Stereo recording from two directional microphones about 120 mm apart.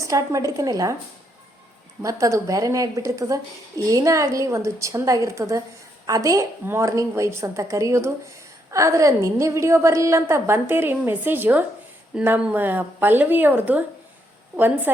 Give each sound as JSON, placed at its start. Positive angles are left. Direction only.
{"t": 0.0, "sound": "a woman's voice", "side_deg": -25}
{"t": 2.0, "sound": "a woman's voice", "side_deg": -25}